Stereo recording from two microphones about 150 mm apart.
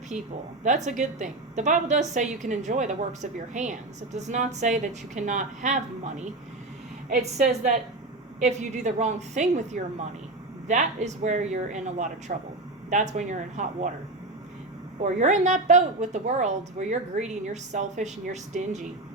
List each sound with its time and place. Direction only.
0.9 s a woman's voice: 55° right (ahead or behind)
15.0 s a woman's voice: 50° right (ahead or behind)